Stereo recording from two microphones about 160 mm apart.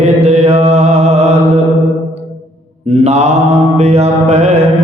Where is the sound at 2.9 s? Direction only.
40° right (ahead or behind).